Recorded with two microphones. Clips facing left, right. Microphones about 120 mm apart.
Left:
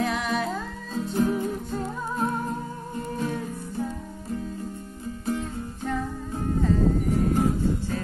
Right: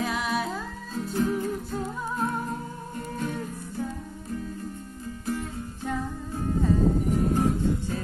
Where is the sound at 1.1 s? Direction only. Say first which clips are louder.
Left 2 dB; 20° left (ahead or behind).